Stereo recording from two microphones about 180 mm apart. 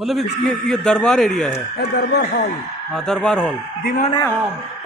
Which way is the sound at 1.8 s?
70° left (ahead or behind).